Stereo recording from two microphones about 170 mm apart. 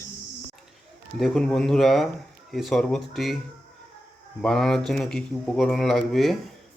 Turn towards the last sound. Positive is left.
turn(degrees=0)  # may be behind; listen again after turning